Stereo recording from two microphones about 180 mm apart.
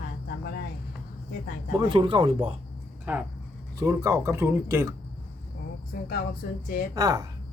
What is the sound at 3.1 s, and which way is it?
Speech, 10° right (ahead or behind).